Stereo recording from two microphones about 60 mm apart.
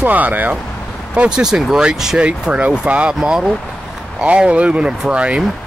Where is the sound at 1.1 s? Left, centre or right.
Centre.